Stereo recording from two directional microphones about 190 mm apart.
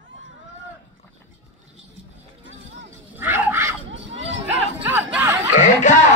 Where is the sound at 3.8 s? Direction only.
75° right (ahead or behind).